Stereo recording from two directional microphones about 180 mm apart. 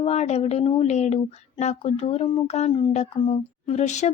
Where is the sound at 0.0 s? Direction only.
35° left (ahead or behind).